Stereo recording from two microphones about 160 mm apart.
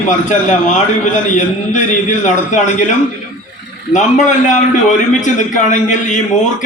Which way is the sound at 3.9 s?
50° left (ahead or behind).